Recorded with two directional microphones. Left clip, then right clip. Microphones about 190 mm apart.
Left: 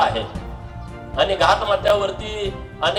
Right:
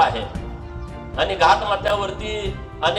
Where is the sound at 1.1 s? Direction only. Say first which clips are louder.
Even; 25° left (ahead or behind).